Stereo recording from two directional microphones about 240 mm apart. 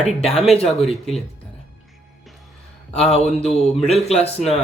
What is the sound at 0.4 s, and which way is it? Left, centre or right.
Speech, left.